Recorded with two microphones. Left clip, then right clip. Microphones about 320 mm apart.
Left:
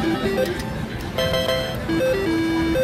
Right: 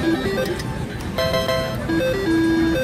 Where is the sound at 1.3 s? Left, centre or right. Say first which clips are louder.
Right 1 dB; centre.